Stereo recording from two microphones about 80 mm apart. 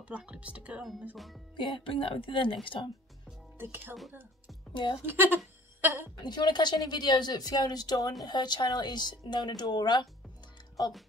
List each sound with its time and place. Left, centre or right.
0.0 s speech: centre
1.1 s speech: centre
1.6 s speech: left
3.5 s speech: right
5.0 s speech: right
5.8 s a sound: right
6.2 s speech: left